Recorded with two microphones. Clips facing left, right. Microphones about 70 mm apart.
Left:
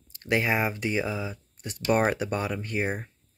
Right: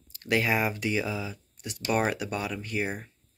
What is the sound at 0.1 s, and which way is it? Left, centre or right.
Speech, left.